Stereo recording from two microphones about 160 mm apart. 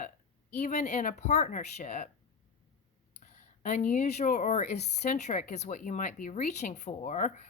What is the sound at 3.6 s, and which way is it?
Speech, 50° left (ahead or behind).